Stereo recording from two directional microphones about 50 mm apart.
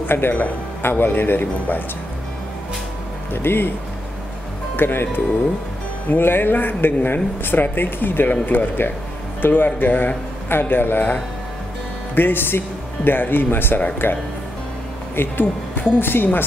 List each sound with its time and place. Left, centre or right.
0.0 s speech: left
3.4 s speech: left
4.7 s speech: left
12.2 s speech: left